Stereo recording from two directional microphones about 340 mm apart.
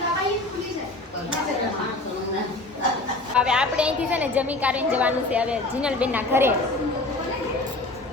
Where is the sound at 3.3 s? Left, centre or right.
Centre.